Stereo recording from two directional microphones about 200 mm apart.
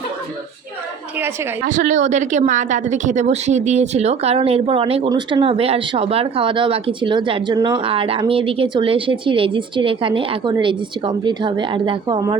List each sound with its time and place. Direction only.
1.6 s speech: 40° right (ahead or behind); by 12.4 s 20° right (ahead or behind)